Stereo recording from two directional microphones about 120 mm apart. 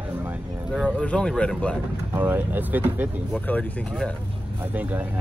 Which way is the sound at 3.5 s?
10° left (ahead or behind).